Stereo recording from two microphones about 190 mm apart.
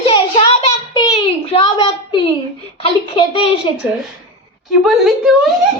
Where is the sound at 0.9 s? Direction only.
20° left (ahead or behind).